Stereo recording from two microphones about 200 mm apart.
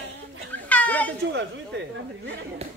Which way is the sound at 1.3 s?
60° right (ahead or behind).